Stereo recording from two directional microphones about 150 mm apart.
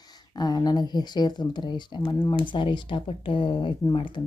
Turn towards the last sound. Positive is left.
turn(degrees=30)  # may be behind; listen again after turning